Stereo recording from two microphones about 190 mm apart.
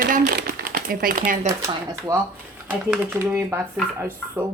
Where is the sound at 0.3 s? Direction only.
45° right (ahead or behind).